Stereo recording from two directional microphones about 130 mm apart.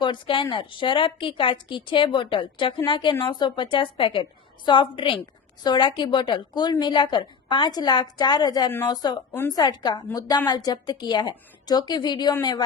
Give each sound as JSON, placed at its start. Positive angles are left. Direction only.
{"t": 0.0, "sound": "a woman's voice", "side_deg": 40}